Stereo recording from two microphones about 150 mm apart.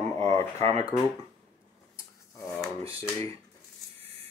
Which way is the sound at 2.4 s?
Centre (ahead or behind).